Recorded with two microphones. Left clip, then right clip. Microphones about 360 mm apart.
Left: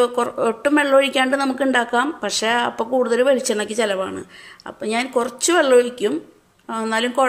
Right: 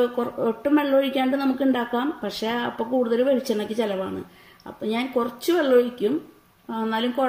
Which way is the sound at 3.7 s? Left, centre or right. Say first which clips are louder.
Left 6 dB; left.